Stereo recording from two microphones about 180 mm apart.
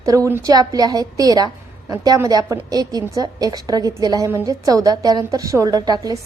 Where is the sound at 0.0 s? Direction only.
20° right (ahead or behind).